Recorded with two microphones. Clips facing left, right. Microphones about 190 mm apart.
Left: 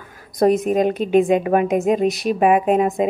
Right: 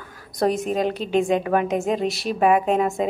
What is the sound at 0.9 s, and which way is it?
Speech, 50° left (ahead or behind).